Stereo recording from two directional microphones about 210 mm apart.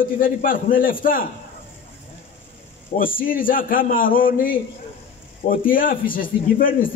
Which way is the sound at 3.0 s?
40° left (ahead or behind).